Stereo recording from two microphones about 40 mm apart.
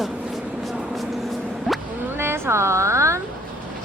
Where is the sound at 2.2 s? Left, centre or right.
Right.